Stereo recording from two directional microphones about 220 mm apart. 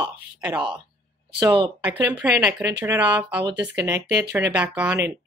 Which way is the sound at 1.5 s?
20° right (ahead or behind).